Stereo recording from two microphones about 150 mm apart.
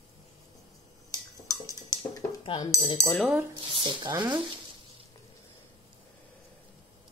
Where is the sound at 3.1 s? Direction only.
Centre (ahead or behind).